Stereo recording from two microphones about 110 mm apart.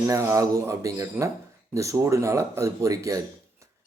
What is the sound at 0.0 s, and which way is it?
Speech, 30° right (ahead or behind).